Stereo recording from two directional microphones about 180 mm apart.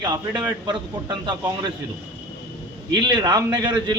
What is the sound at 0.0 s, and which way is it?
A man's voice, 25° right (ahead or behind).